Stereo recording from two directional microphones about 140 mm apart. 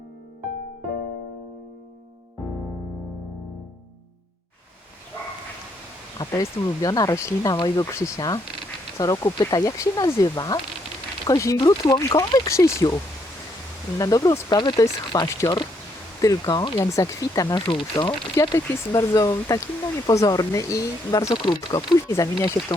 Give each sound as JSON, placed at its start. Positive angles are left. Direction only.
{"t": 6.1, "sound": "speech", "side_deg": 25}
{"t": 14.0, "sound": "speech", "side_deg": 25}
{"t": 21.3, "sound": "speech", "side_deg": 35}
{"t": 22.1, "sound": "speech", "side_deg": 20}